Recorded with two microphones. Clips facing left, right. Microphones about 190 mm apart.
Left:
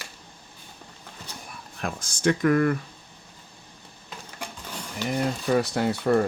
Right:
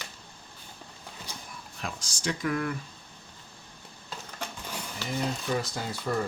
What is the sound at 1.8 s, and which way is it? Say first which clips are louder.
Speech: left 10 dB; 55° left (ahead or behind).